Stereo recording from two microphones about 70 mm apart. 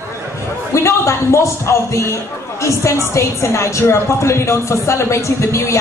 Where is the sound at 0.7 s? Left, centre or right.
Left.